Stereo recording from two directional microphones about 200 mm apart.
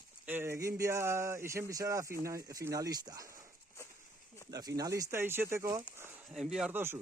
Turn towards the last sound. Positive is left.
turn(degrees=-10)  # may be behind; listen again after turning